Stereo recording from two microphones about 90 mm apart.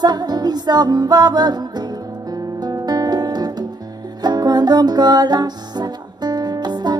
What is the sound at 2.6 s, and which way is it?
Music, 50° right (ahead or behind).